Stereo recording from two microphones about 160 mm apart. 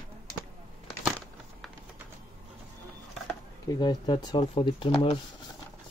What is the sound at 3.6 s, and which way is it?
Speech, 25° left (ahead or behind).